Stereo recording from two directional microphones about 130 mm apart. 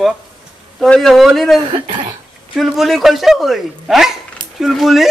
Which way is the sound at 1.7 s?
40° right (ahead or behind).